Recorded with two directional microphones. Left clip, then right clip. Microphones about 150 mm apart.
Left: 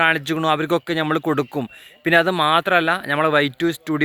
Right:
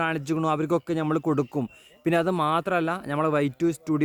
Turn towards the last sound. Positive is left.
turn(degrees=-5)  # may be behind; listen again after turning